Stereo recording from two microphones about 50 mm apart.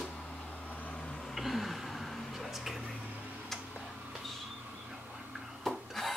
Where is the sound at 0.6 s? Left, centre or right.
Left.